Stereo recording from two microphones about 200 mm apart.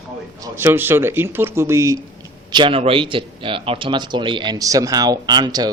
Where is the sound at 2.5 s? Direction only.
25° right (ahead or behind).